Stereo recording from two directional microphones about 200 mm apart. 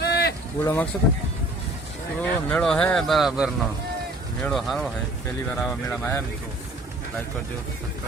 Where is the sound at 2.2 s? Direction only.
5° left (ahead or behind).